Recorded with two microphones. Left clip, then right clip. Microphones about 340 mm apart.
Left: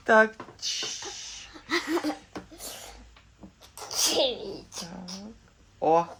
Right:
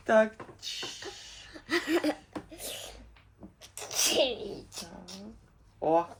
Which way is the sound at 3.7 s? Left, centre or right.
Centre.